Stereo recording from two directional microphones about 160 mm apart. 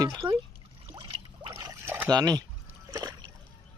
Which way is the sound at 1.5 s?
20° right (ahead or behind).